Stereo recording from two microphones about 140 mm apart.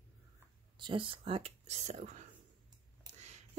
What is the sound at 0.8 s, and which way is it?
Speech, 35° right (ahead or behind).